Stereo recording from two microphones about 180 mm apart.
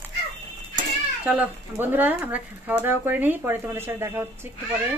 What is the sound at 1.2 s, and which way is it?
Speech, 10° right (ahead or behind).